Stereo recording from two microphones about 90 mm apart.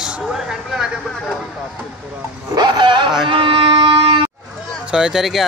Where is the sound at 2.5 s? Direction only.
55° right (ahead or behind).